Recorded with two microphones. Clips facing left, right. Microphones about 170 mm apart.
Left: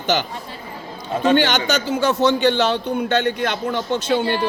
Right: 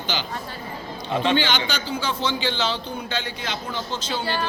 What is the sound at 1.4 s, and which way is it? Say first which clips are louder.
A man's voice: left 6 dB; 65° left (ahead or behind).